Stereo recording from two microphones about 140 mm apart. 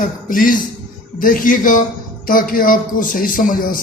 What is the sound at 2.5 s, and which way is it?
A man's voice, 90° left.